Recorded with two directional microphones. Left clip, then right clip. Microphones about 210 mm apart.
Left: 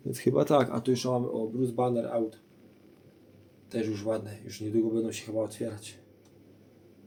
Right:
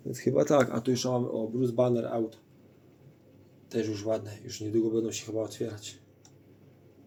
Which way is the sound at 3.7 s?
5° right (ahead or behind).